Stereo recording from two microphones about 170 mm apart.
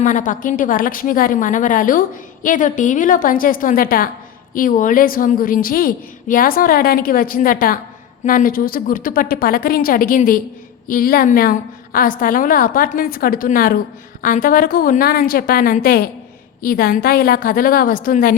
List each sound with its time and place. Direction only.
0.0 s a woman's voice: 50° left (ahead or behind)